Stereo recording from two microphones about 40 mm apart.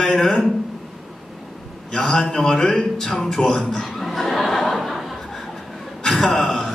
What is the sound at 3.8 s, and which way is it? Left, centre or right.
Chuckle, centre.